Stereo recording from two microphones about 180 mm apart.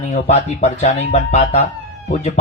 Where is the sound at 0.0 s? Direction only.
40° left (ahead or behind).